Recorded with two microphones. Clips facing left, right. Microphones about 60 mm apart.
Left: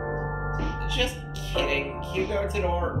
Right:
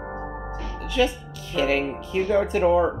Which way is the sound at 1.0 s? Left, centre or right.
Right.